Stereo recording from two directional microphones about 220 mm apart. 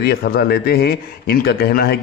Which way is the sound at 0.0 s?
45° left (ahead or behind).